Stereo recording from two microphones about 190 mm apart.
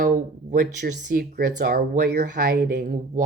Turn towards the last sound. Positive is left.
turn(degrees=-45)  # may be behind; listen again after turning